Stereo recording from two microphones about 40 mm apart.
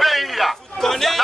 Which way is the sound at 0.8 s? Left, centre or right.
Centre.